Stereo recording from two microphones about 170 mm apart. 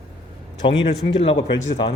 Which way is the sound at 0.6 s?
30° left (ahead or behind).